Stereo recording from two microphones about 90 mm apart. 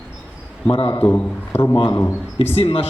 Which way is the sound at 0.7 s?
70° left (ahead or behind).